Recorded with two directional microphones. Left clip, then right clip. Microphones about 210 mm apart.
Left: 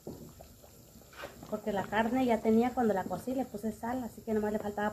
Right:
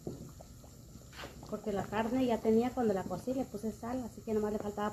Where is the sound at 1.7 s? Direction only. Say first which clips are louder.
Left 3 dB; 20° right (ahead or behind).